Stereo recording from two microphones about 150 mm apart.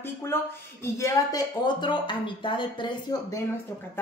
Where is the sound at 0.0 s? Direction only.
15° left (ahead or behind).